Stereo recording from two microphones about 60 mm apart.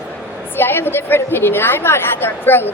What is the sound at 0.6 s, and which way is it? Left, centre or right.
A woman's voice, left.